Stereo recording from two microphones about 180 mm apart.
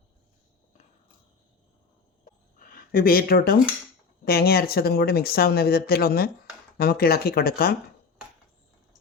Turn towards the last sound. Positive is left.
turn(degrees=60)  # may be behind; listen again after turning